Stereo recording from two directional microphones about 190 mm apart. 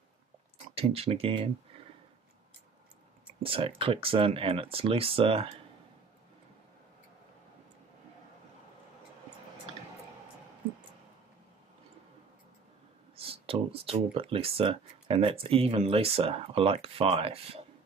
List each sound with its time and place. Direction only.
0.7 s speech: 30° right (ahead or behind)
3.4 s speech: 30° right (ahead or behind)
13.1 s speech: 30° right (ahead or behind)